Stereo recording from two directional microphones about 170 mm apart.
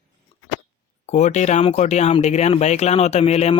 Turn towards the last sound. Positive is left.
turn(degrees=40)  # may be behind; listen again after turning